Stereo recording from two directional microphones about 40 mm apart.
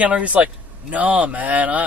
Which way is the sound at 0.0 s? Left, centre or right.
Right.